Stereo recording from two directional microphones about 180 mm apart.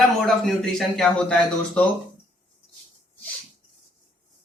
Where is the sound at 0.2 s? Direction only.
Centre (ahead or behind).